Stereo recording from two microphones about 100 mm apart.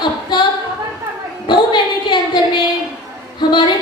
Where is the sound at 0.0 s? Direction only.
45° left (ahead or behind).